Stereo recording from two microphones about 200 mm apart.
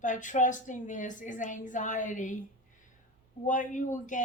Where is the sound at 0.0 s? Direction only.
40° left (ahead or behind).